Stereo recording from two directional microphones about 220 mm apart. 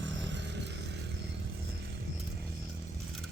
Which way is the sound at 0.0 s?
55° right (ahead or behind).